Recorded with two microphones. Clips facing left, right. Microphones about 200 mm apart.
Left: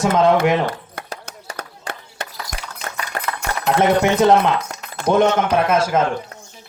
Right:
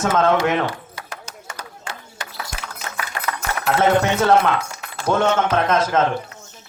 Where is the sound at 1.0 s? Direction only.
60° left (ahead or behind).